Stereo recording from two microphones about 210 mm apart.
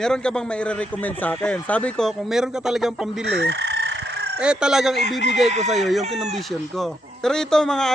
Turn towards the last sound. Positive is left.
turn(degrees=0)  # may be behind; listen again after turning